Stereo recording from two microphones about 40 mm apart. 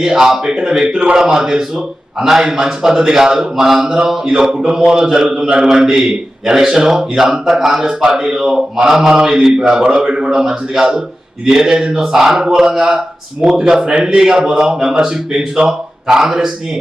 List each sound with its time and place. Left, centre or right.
0.0 s a man's voice: centre